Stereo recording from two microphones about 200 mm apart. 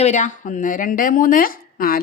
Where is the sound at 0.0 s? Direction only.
35° left (ahead or behind).